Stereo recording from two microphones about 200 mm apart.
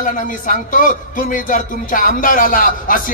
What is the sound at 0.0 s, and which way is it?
Speech, 40° left (ahead or behind).